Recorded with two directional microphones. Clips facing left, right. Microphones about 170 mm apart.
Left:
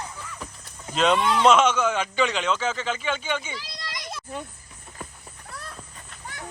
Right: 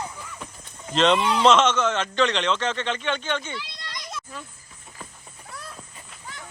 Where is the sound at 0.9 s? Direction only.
5° left (ahead or behind).